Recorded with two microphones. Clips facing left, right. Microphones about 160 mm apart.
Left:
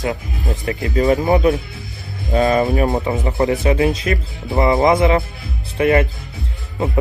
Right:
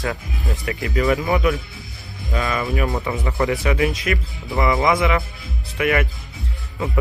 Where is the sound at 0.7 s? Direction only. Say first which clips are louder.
Left 4 dB; 35° left (ahead or behind).